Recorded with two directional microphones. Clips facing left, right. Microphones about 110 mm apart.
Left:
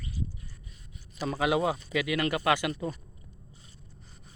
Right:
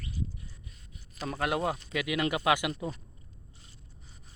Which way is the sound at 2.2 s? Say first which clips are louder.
Right 1 dB; 15° right (ahead or behind).